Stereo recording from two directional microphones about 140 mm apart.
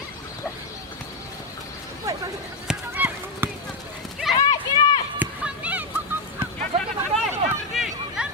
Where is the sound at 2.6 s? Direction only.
10° right (ahead or behind).